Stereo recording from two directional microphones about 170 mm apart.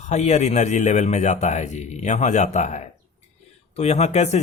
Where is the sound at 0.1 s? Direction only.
40° left (ahead or behind).